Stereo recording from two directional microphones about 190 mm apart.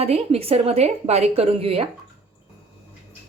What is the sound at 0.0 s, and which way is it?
A woman's voice, 30° right (ahead or behind).